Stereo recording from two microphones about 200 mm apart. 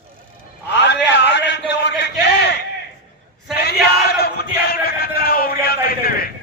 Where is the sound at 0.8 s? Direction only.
60° left (ahead or behind).